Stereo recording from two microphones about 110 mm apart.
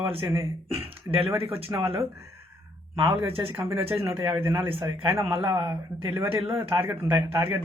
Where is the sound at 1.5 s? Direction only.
60° right (ahead or behind).